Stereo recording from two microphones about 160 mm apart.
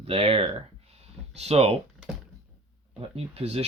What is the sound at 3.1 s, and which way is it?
Speech, 40° right (ahead or behind).